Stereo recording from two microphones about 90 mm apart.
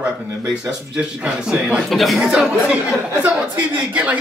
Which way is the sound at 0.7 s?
10° right (ahead or behind).